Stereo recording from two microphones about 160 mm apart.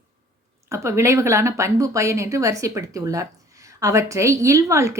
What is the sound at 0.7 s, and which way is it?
A woman's voice, 15° right (ahead or behind).